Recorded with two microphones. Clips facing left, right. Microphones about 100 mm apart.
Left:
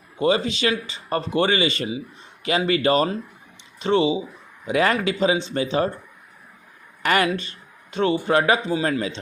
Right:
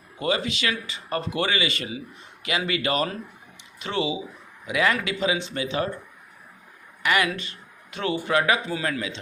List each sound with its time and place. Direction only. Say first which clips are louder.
0.2 s speech: left 5 dB; 30° left (ahead or behind)
7.0 s speech: left 3 dB; 40° left (ahead or behind)